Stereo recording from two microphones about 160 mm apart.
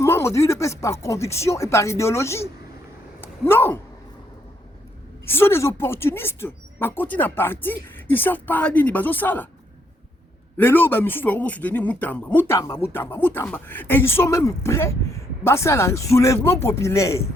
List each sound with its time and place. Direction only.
0.0 s a man's voice: 15° left (ahead or behind)
3.2 s cat: 15° left (ahead or behind)
5.2 s a man's voice: 15° left (ahead or behind)
10.6 s a man's voice: 10° left (ahead or behind)